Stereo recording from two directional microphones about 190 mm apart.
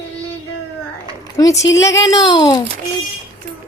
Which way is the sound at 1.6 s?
15° left (ahead or behind).